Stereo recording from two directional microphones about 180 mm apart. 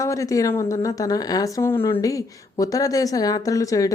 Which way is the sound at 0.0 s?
15° left (ahead or behind).